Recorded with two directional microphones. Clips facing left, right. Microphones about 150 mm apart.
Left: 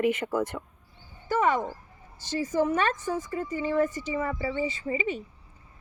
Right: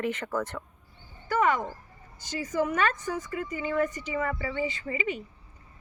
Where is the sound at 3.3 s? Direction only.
30° left (ahead or behind).